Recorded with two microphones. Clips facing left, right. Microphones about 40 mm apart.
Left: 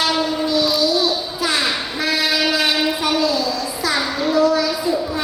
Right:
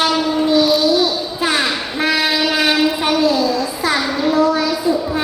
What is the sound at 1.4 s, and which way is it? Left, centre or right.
Train, right.